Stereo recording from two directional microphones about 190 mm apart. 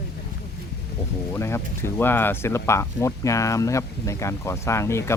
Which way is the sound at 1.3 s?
15° left (ahead or behind).